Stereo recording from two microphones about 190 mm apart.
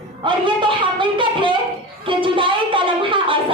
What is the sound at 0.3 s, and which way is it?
A man's voice, 25° right (ahead or behind).